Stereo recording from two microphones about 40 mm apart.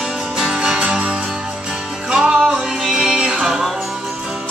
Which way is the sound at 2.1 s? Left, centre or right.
Right.